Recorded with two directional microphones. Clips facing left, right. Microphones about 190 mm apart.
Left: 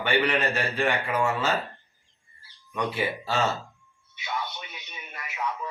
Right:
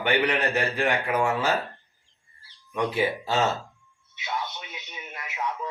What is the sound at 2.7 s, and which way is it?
Speech, 15° right (ahead or behind).